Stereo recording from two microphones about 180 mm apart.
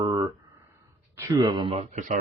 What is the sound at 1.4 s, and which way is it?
Speech, 25° right (ahead or behind).